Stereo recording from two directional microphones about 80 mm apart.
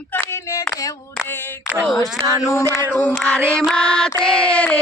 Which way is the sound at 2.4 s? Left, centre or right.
Left.